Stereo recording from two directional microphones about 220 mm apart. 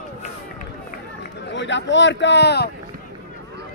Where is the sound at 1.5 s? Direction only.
55° left (ahead or behind).